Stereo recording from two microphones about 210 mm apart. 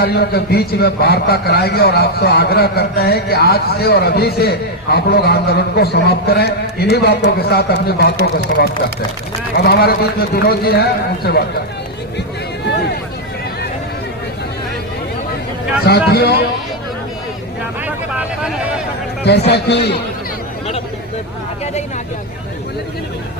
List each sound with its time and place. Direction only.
0.0 s a man's voice: 50° left (ahead or behind)
15.9 s a man's voice: 50° left (ahead or behind)
17.8 s a sound: 5° right (ahead or behind)
19.5 s a man's voice: 55° left (ahead or behind)